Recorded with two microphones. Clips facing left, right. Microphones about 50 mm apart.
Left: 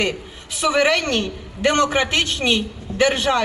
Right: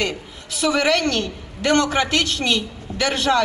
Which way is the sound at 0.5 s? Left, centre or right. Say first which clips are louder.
Left 1 dB; left.